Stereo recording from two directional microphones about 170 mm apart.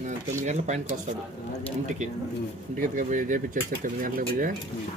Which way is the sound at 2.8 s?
50° right (ahead or behind).